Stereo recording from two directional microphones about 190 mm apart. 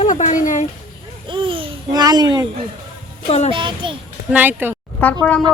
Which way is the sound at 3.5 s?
25° right (ahead or behind).